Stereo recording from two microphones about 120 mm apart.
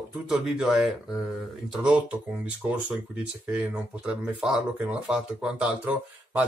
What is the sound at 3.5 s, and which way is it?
Speech, 10° right (ahead or behind).